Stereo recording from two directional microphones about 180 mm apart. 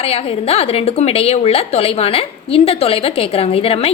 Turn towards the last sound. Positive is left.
turn(degrees=35)  # may be behind; listen again after turning